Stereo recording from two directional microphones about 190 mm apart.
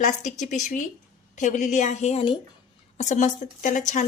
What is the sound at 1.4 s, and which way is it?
A woman's voice, 40° left (ahead or behind).